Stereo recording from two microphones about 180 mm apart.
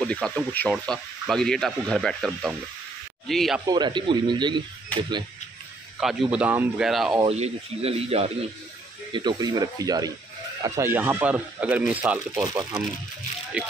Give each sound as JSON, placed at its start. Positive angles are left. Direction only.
{"t": 0.0, "sound": "speech", "side_deg": 5}
{"t": 3.6, "sound": "speech", "side_deg": -25}
{"t": 5.9, "sound": "speech", "side_deg": -5}
{"t": 7.2, "sound": "speech", "side_deg": -35}